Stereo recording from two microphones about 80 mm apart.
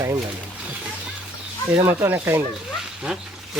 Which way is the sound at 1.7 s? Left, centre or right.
Right.